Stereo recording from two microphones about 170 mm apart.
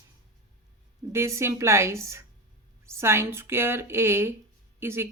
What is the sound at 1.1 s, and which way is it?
Speech, 15° right (ahead or behind).